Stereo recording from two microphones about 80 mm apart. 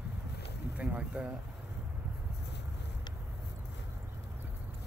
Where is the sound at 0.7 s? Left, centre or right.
Centre.